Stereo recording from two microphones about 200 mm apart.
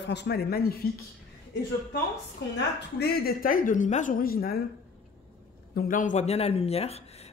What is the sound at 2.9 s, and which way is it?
A woman's voice, 50° left (ahead or behind).